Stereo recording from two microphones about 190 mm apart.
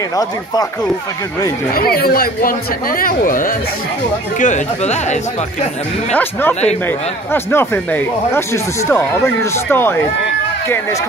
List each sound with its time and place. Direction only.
1.8 s speech: 50° left (ahead or behind)
7.5 s speech: 10° left (ahead or behind)